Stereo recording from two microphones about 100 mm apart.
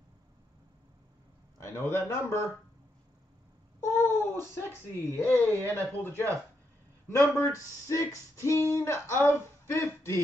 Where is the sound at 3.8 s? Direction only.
25° left (ahead or behind).